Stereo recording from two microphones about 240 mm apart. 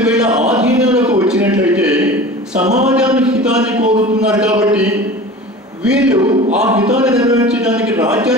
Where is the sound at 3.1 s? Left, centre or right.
Centre.